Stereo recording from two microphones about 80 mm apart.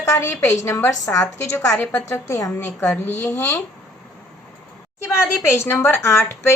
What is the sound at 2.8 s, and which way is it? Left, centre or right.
Speech, left.